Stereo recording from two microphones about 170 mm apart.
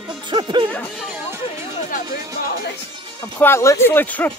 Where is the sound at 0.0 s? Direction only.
25° right (ahead or behind).